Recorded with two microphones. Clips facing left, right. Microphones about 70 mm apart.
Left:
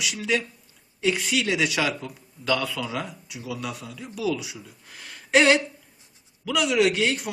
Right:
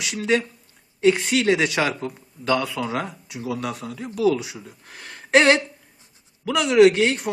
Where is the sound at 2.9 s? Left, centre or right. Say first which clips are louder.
Right 4 dB; right.